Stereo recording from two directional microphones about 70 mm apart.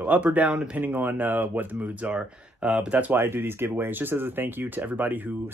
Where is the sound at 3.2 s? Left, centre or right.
Right.